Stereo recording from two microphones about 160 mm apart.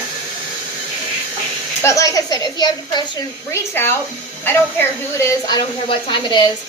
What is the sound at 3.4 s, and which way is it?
A woman's voice, 15° left (ahead or behind).